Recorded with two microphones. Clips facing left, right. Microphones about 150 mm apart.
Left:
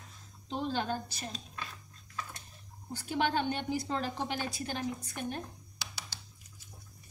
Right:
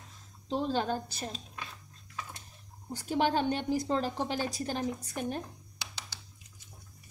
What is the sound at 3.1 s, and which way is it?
A woman's voice, 35° right (ahead or behind).